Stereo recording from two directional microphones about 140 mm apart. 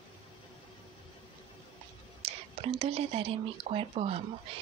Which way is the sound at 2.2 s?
45° right (ahead or behind).